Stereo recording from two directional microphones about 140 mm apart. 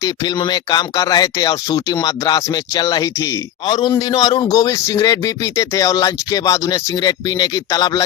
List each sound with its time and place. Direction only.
0.0 s speech: 30° left (ahead or behind)